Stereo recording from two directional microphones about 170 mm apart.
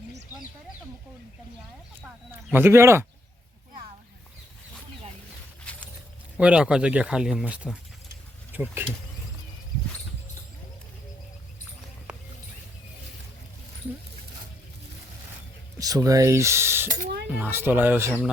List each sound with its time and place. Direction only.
2.5 s speech: 15° right (ahead or behind)
6.3 s speech: 5° right (ahead or behind)
12.1 s clip-clop: 5° right (ahead or behind)
15.8 s speech: 20° right (ahead or behind)